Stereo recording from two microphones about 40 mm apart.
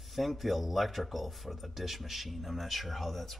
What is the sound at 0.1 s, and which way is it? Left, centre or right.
Speech, centre.